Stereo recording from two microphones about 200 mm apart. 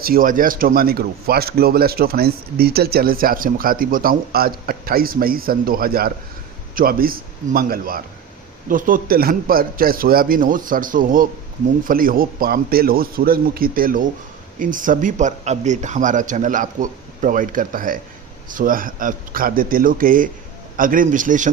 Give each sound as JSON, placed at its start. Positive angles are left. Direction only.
{"t": 0.0, "sound": "a man's voice", "side_deg": -45}